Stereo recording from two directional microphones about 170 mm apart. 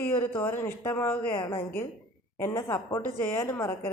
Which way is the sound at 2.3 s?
15° left (ahead or behind).